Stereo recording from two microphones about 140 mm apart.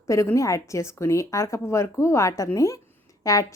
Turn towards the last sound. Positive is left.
turn(degrees=25)  # may be behind; listen again after turning